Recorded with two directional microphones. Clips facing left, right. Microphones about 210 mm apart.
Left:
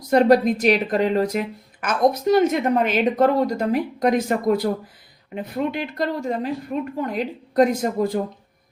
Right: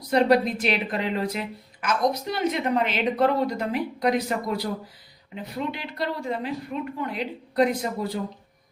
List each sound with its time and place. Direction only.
0.1 s speech: 45° left (ahead or behind)